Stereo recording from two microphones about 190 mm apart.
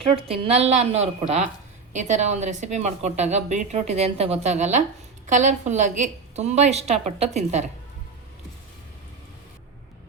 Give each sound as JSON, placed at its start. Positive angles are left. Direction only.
{"t": 0.3, "sound": "speech", "side_deg": -30}